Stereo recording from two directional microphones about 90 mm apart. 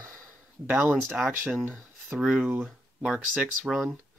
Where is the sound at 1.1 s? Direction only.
5° right (ahead or behind).